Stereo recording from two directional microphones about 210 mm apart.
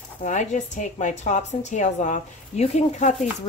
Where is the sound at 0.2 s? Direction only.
35° left (ahead or behind).